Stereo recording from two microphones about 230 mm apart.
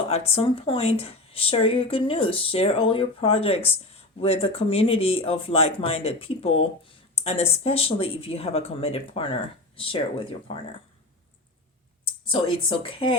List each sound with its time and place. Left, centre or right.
0.1 s speech: left
12.3 s speech: left